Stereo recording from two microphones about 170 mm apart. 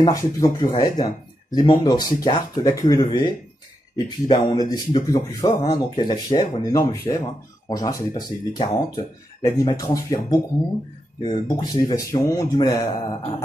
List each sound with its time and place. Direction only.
0.0 s a man's voice: 20° left (ahead or behind)